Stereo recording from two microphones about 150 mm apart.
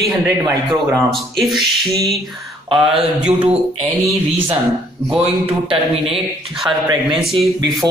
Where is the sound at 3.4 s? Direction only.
40° right (ahead or behind).